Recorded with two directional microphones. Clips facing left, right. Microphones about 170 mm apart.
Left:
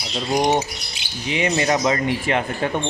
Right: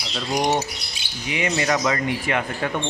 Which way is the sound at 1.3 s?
25° left (ahead or behind).